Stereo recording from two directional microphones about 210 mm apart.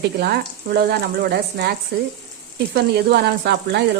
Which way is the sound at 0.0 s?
50° right (ahead or behind).